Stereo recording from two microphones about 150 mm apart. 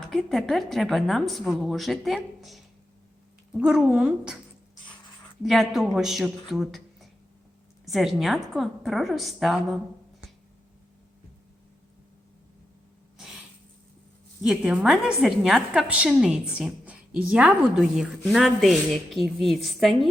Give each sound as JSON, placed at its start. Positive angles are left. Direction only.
{"t": 0.1, "sound": "a woman's voice", "side_deg": 0}
{"t": 5.4, "sound": "a woman's voice", "side_deg": 0}
{"t": 6.5, "sound": "a sound", "side_deg": 0}
{"t": 7.9, "sound": "a woman's voice", "side_deg": 0}
{"t": 14.4, "sound": "a woman's voice", "side_deg": -5}